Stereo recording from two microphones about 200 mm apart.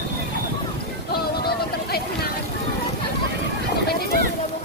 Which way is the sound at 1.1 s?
50° left (ahead or behind).